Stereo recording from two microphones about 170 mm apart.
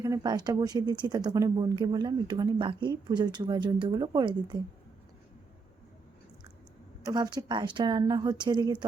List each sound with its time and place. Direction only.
0.0 s speech: 20° right (ahead or behind)
7.0 s speech: 25° right (ahead or behind)